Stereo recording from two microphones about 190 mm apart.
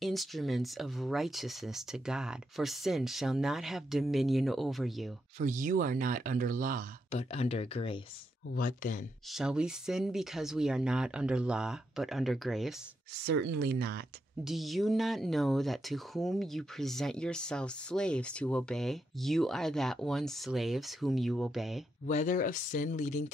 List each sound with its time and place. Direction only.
0.0 s speech: centre (ahead or behind)
5.4 s speech: 40° right (ahead or behind)
7.1 s speech: 30° left (ahead or behind)
8.5 s speech: 45° left (ahead or behind)
9.3 s speech: 5° right (ahead or behind)
13.2 s speech: 60° right (ahead or behind)
14.4 s speech: centre (ahead or behind)
22.0 s speech: 40° left (ahead or behind)